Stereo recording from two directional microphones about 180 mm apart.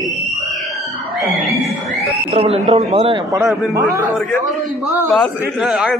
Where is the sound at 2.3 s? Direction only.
35° right (ahead or behind).